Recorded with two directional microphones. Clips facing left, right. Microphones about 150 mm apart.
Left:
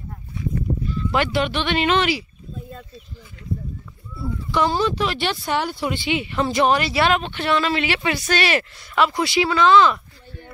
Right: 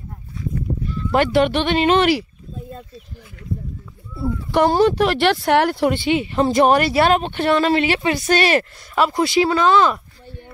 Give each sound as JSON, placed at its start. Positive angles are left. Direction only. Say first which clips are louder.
{"t": 0.9, "sound": "speech", "louder": "right 6 dB", "side_deg": -50}
{"t": 4.5, "sound": "speech", "louder": "right 6 dB", "side_deg": -60}
{"t": 5.8, "sound": "speech", "louder": "right 6 dB", "side_deg": -50}